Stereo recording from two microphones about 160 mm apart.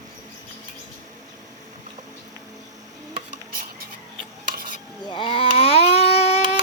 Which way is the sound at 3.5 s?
65° right (ahead or behind).